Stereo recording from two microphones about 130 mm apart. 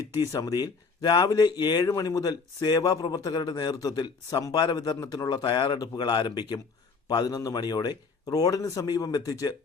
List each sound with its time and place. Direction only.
0.3 s a man's voice: 25° left (ahead or behind)